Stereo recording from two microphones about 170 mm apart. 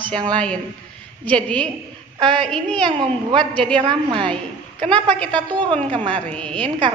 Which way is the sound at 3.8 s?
30° right (ahead or behind).